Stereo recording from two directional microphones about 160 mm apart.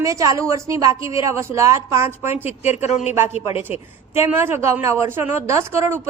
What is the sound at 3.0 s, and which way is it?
A woman's voice, 15° right (ahead or behind).